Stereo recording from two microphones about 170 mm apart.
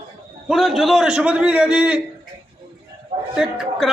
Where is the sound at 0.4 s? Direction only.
Centre (ahead or behind).